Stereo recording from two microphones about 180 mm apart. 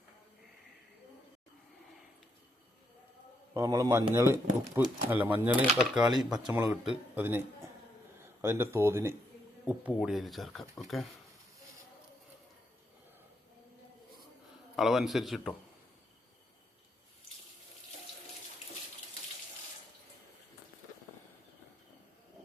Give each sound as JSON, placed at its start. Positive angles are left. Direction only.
{"t": 3.5, "sound": "speech", "side_deg": -20}
{"t": 14.8, "sound": "speech", "side_deg": 0}